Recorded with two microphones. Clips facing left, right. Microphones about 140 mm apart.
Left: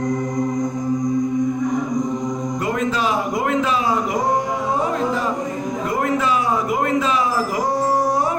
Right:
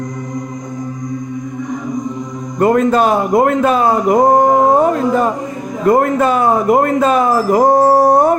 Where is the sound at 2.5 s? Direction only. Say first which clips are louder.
Right 13 dB; 50° right (ahead or behind).